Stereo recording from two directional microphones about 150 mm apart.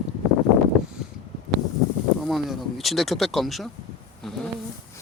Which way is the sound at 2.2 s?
Centre (ahead or behind).